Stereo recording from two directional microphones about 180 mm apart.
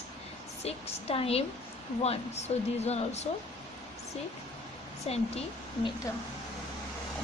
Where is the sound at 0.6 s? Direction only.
35° left (ahead or behind).